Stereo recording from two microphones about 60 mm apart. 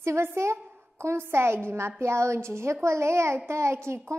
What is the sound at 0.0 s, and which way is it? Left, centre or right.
A woman's voice, right.